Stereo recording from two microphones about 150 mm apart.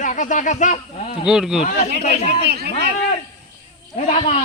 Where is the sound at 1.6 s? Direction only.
50° left (ahead or behind).